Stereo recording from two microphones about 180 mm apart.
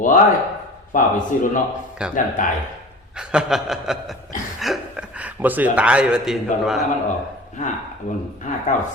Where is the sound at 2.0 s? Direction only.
5° right (ahead or behind).